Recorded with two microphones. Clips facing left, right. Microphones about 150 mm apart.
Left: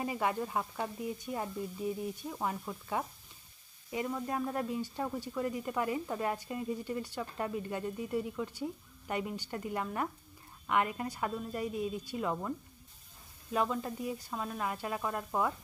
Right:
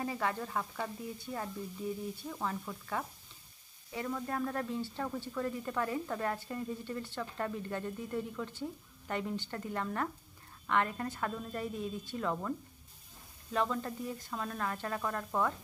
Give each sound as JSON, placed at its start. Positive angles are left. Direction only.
{"t": 0.0, "sound": "speech", "side_deg": 15}